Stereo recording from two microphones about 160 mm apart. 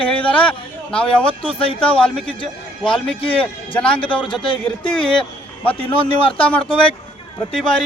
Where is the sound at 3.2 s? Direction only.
35° left (ahead or behind).